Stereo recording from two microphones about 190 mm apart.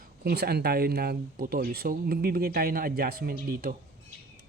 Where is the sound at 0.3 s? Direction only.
55° right (ahead or behind).